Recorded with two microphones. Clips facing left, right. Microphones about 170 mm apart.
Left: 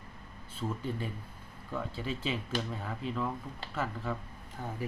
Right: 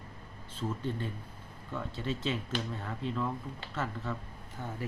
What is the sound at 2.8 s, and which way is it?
Speech, 5° left (ahead or behind).